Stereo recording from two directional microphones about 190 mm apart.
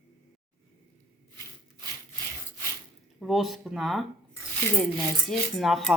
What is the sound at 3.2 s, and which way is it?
Speech, centre (ahead or behind).